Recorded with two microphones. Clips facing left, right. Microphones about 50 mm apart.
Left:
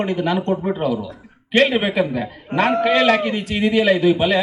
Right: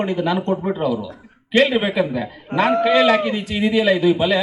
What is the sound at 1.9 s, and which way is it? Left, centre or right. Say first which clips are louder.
A man's voice: even; left.